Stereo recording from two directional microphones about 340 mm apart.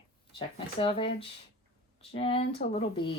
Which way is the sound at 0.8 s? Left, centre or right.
Centre.